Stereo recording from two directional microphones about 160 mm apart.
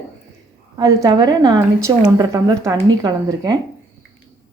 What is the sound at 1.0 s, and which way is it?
A woman's voice, 25° right (ahead or behind).